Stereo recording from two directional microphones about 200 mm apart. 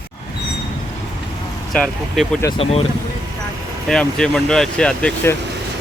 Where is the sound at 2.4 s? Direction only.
25° left (ahead or behind).